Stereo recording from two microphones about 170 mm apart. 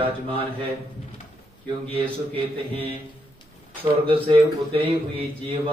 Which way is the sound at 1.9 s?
35° right (ahead or behind).